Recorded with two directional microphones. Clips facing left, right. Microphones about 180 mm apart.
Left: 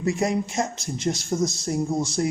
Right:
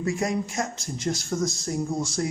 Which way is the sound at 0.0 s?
20° left (ahead or behind).